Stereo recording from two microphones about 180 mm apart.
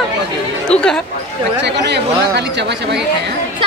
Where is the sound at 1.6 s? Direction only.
70° right (ahead or behind).